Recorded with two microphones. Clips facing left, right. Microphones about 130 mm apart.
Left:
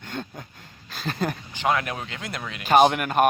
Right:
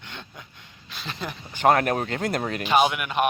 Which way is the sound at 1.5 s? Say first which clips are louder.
Right 8 dB; 50° right (ahead or behind).